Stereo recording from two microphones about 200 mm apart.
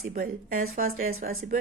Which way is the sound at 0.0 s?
45° right (ahead or behind).